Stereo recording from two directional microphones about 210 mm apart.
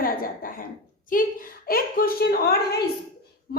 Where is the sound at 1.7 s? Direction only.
45° left (ahead or behind).